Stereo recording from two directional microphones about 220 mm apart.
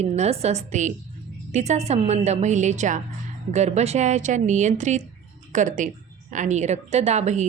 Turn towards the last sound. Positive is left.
turn(degrees=-30)  # may be behind; listen again after turning